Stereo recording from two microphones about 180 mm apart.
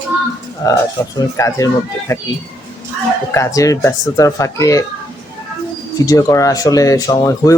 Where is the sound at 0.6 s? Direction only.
20° left (ahead or behind).